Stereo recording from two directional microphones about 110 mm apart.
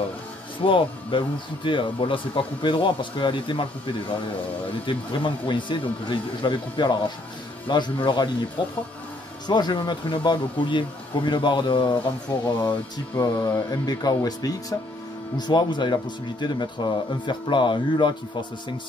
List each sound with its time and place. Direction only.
0.6 s speech: 50° left (ahead or behind)
9.5 s speech: 40° left (ahead or behind)
12.3 s speech: 35° left (ahead or behind)